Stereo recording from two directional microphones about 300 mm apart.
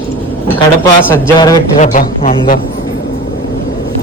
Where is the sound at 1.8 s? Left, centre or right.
Left.